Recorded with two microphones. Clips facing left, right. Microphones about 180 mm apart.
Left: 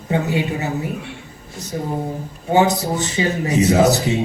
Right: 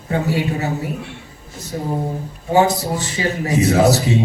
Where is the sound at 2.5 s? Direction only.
20° left (ahead or behind).